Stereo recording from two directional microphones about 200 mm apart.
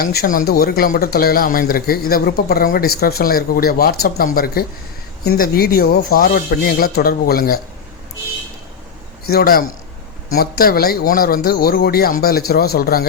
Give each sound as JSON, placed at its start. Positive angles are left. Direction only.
{"t": 0.0, "sound": "speech", "side_deg": 50}
{"t": 9.2, "sound": "speech", "side_deg": 50}